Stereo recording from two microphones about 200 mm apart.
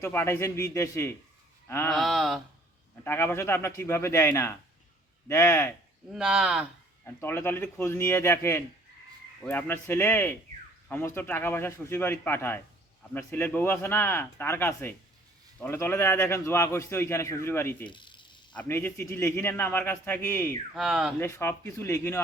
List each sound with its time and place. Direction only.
0.0 s a man's voice: 10° left (ahead or behind)
1.9 s speech: centre (ahead or behind)
2.9 s a man's voice: 10° left (ahead or behind)
6.1 s speech: 5° right (ahead or behind)
7.0 s a man's voice: 10° left (ahead or behind)
17.8 s a sound: 25° left (ahead or behind)
18.5 s a man's voice: 10° left (ahead or behind)
20.7 s speech: centre (ahead or behind)
21.2 s a man's voice: 10° left (ahead or behind)